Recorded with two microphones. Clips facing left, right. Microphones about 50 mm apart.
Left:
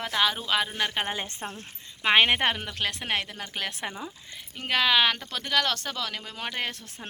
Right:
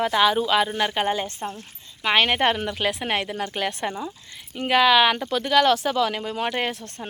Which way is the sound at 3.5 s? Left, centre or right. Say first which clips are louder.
Right 6 dB; centre.